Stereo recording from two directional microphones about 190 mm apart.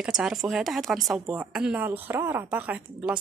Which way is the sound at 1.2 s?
15° right (ahead or behind).